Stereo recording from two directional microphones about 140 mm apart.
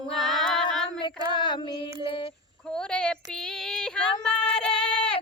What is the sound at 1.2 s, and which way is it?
Child singing, 30° right (ahead or behind).